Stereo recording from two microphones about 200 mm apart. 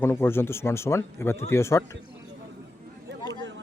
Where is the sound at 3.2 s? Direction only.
20° left (ahead or behind).